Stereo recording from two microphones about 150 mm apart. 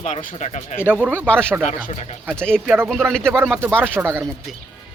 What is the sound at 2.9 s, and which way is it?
Speech, 5° left (ahead or behind).